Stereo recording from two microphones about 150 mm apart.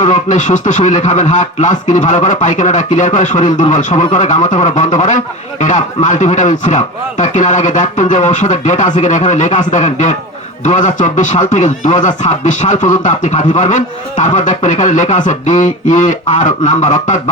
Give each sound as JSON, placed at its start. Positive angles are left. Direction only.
{"t": 0.0, "sound": "a man's voice", "side_deg": 55}